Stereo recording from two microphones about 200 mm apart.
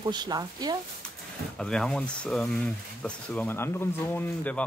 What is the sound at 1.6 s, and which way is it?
Speech, 5° left (ahead or behind).